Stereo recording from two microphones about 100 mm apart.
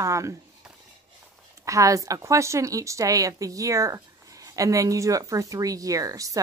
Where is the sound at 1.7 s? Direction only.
35° right (ahead or behind).